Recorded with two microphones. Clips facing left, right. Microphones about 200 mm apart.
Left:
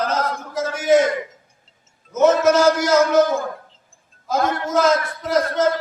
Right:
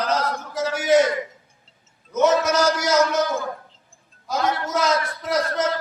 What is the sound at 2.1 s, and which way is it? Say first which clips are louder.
A man's voice: left 4 dB; 50° left (ahead or behind).